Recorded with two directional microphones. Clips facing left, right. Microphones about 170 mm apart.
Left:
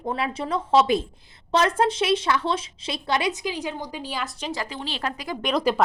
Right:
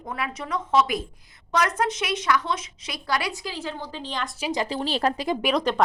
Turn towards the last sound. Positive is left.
turn(degrees=5)  # may be behind; listen again after turning